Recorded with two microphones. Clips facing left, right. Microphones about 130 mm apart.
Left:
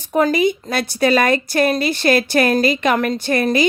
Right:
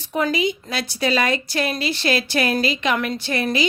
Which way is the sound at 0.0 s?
45° left (ahead or behind).